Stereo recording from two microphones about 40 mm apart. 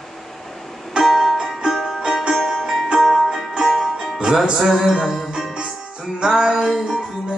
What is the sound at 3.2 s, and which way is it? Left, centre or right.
Music, centre.